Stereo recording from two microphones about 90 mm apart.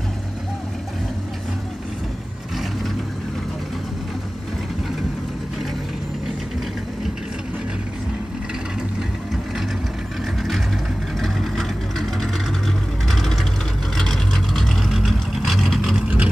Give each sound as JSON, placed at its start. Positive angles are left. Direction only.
{"t": 11.1, "sound": "vehicle", "side_deg": 0}